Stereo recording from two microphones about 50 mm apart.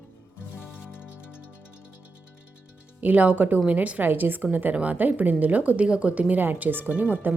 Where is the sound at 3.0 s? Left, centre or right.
Right.